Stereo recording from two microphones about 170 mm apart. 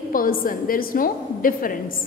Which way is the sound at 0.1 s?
55° left (ahead or behind).